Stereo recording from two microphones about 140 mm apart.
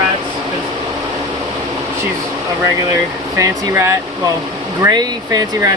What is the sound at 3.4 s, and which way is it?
Speech, 20° right (ahead or behind).